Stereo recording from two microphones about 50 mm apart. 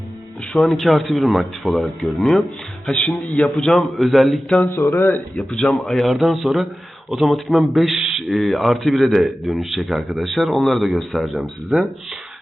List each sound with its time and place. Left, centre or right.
0.6 s speech: centre
3.4 s speech: centre
4.7 s speech: left
5.4 s speech: centre
11.7 s speech: centre